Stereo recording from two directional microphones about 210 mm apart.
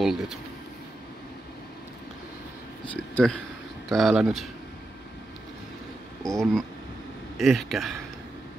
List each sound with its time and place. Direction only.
0.0 s speech: centre (ahead or behind)
2.9 s speech: 5° left (ahead or behind)
6.2 s speech: centre (ahead or behind)